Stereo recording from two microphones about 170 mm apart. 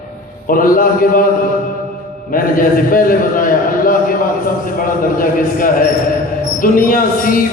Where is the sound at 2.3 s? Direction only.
55° left (ahead or behind).